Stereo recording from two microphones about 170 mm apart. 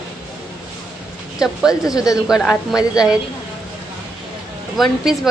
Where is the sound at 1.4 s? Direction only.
5° right (ahead or behind).